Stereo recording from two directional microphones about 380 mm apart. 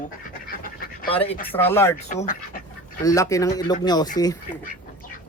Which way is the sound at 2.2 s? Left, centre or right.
Centre.